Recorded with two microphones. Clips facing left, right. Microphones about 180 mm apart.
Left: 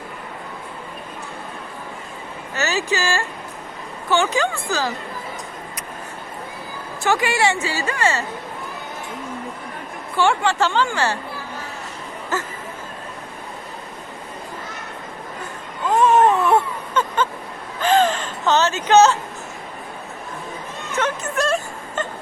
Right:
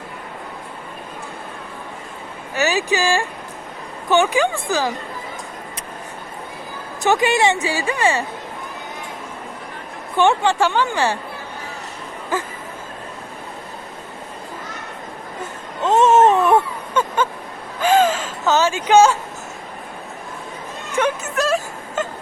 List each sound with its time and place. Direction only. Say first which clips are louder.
2.6 s a woman's voice: right 3 dB; 15° right (ahead or behind)
7.0 s a woman's voice: right 3 dB; 20° right (ahead or behind)
10.2 s a woman's voice: right 2 dB; 20° right (ahead or behind)
12.3 s a woman's voice: right 2 dB; 10° right (ahead or behind)
15.8 s a sound: right 2 dB; 25° right (ahead or behind)
17.7 s gasp: right 2 dB; 10° right (ahead or behind)
20.9 s a sound: right 3 dB; 5° right (ahead or behind)